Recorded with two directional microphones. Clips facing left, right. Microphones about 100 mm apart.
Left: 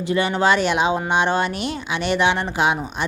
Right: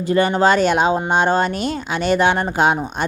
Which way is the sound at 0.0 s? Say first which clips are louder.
Right 4 dB; 40° right (ahead or behind).